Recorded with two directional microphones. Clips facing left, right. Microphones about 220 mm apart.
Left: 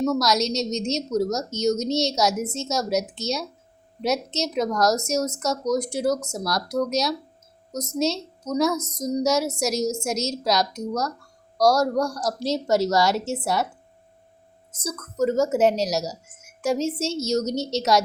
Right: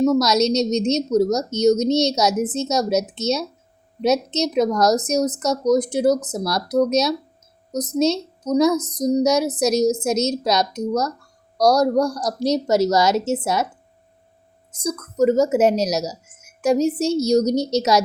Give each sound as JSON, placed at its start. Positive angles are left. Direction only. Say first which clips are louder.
{"t": 0.1, "sound": "a woman's voice", "louder": "right 5 dB", "side_deg": -20}
{"t": 14.7, "sound": "a woman's voice", "louder": "right 6 dB", "side_deg": -15}